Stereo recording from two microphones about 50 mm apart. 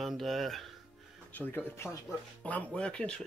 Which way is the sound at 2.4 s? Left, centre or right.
Left.